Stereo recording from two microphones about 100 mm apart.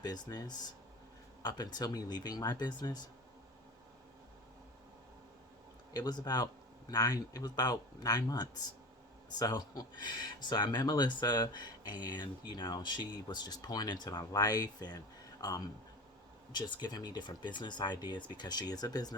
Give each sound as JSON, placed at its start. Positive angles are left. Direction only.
{"t": 0.0, "sound": "speech", "side_deg": 40}
{"t": 5.9, "sound": "speech", "side_deg": 40}